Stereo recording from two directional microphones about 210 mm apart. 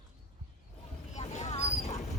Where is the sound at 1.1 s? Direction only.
35° left (ahead or behind).